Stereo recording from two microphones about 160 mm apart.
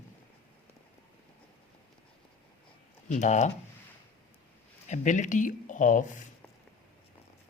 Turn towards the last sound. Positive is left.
turn(degrees=55)  # may be behind; listen again after turning